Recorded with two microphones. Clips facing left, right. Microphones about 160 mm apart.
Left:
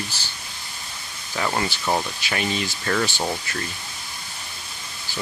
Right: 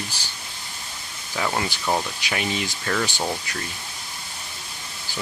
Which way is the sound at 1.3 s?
Centre (ahead or behind).